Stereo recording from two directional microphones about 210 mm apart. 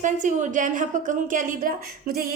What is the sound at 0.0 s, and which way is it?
A woman's voice, 35° right (ahead or behind).